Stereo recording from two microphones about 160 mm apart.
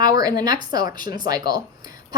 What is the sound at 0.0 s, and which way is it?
A woman's voice, 25° right (ahead or behind).